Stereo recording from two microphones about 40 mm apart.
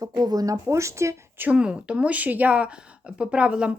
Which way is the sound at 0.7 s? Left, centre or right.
Right.